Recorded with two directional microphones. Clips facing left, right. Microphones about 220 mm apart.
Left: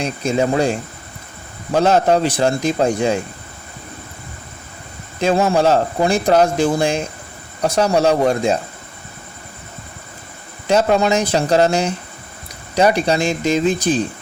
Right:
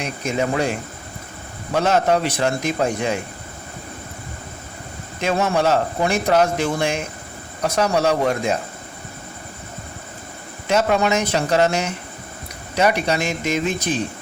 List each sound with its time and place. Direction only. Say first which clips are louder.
0.0 s speech: left 4 dB; 30° left (ahead or behind)
5.2 s speech: left 4 dB; 30° left (ahead or behind)
10.7 s speech: left 3 dB; 35° left (ahead or behind)